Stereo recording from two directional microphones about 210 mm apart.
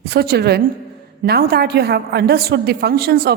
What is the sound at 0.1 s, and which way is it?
A woman's voice, 45° right (ahead or behind).